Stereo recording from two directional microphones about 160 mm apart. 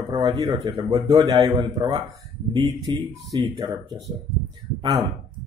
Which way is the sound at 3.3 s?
25° right (ahead or behind).